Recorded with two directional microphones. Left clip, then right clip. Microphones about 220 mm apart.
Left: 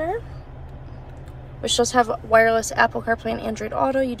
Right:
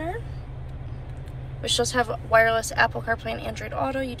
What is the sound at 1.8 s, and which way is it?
Speech, 30° left (ahead or behind).